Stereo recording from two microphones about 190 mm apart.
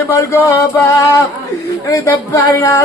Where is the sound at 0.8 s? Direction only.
15° left (ahead or behind).